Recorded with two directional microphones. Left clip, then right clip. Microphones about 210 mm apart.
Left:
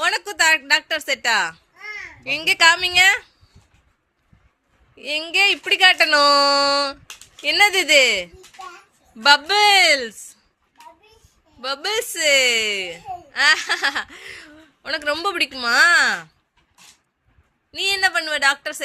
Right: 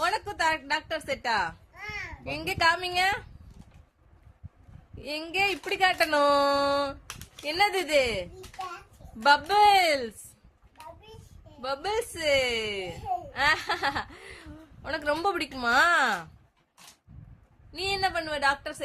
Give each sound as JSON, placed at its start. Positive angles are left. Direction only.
{"t": 0.0, "sound": "a woman's voice", "side_deg": 5}
{"t": 1.7, "sound": "babbling", "side_deg": -30}
{"t": 2.2, "sound": "a woman's voice", "side_deg": 0}
{"t": 4.9, "sound": "a woman's voice", "side_deg": 0}
{"t": 11.6, "sound": "a woman's voice", "side_deg": 0}
{"t": 17.7, "sound": "a woman's voice", "side_deg": 0}